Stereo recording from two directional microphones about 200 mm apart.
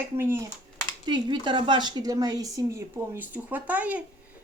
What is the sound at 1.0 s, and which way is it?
Speech, 20° right (ahead or behind).